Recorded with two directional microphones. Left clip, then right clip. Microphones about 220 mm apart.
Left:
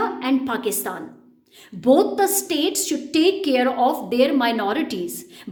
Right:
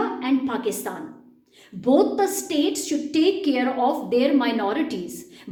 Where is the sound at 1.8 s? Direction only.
45° left (ahead or behind).